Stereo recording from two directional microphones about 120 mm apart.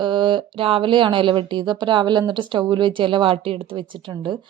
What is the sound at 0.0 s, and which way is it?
Speech, 40° right (ahead or behind).